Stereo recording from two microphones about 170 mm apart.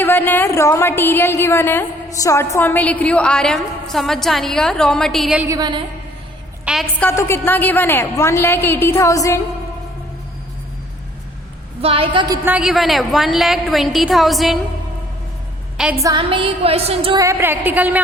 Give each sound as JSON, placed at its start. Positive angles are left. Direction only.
{"t": 0.0, "sound": "a woman's voice", "side_deg": 10}
{"t": 5.5, "sound": "a woman's voice", "side_deg": -25}
{"t": 6.7, "sound": "a woman's voice", "side_deg": -5}
{"t": 7.0, "sound": "a woman's voice", "side_deg": 15}
{"t": 11.8, "sound": "music", "side_deg": -35}
{"t": 12.5, "sound": "a woman's voice", "side_deg": -5}
{"t": 16.0, "sound": "music", "side_deg": -30}
{"t": 17.2, "sound": "a woman's voice", "side_deg": -15}